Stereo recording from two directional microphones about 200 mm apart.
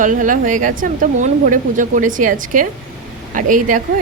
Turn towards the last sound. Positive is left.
turn(degrees=-40)  # may be behind; listen again after turning